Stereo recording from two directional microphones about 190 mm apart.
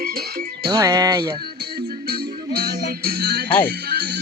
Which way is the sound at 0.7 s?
20° right (ahead or behind).